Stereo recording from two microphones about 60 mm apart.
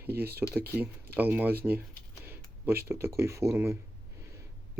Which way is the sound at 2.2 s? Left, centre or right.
Right.